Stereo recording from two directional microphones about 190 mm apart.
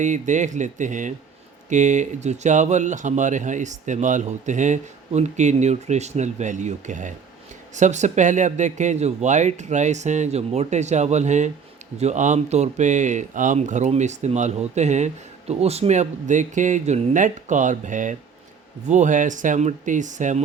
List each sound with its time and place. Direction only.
0.0 s speech: 40° right (ahead or behind)